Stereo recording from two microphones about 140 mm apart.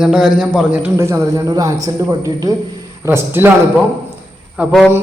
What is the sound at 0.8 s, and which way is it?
Speech, 20° right (ahead or behind).